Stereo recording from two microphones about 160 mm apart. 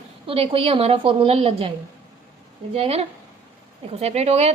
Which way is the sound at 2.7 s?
35° right (ahead or behind).